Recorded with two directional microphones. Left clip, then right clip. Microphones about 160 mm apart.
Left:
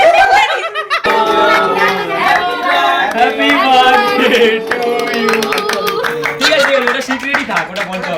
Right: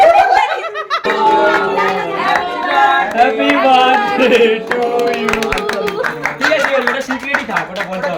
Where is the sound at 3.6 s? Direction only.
50° right (ahead or behind).